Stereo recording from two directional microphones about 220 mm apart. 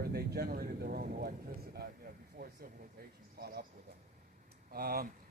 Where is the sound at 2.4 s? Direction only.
45° right (ahead or behind).